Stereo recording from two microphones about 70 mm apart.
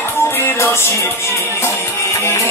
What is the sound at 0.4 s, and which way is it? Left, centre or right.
Music, left.